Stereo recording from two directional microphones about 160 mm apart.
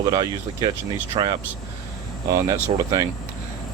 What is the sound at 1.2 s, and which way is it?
Speech, 35° right (ahead or behind).